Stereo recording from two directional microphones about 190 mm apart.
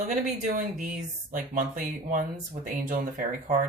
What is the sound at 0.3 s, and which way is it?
Speech, 40° right (ahead or behind).